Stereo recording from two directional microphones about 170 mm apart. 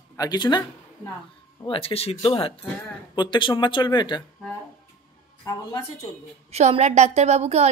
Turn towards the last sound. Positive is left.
turn(degrees=-40)  # may be behind; listen again after turning